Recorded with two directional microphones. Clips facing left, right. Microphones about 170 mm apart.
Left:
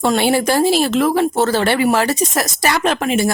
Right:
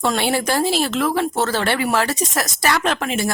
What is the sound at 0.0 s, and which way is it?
Speech, 10° left (ahead or behind).